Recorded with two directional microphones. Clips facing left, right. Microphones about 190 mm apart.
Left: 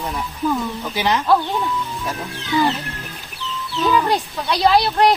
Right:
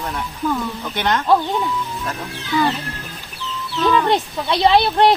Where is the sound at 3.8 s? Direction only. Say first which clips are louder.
Right 1 dB; 5° left (ahead or behind).